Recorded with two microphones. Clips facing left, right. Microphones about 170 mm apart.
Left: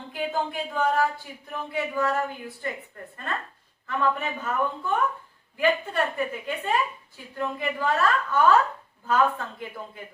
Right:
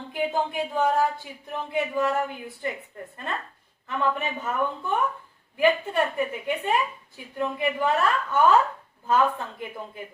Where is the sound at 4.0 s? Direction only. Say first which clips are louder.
Even; 20° right (ahead or behind).